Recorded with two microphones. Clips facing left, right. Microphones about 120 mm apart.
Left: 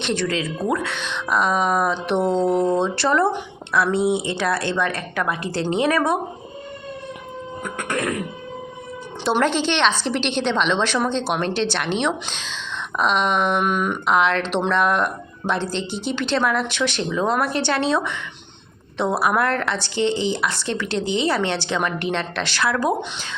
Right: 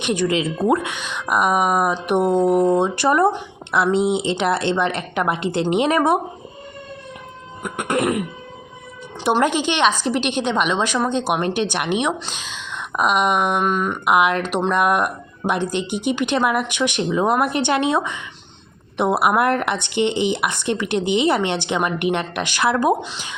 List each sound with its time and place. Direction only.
0.0 s speech: 15° right (ahead or behind)
0.9 s a woman's voice: 10° right (ahead or behind)
7.6 s a woman's voice: 20° right (ahead or behind)
9.4 s speech: 10° right (ahead or behind)
13.7 s a sound: 5° left (ahead or behind)
14.0 s speech: 10° right (ahead or behind)
23.0 s speech: 5° right (ahead or behind)